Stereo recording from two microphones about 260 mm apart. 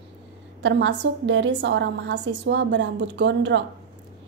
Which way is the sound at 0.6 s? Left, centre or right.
Right.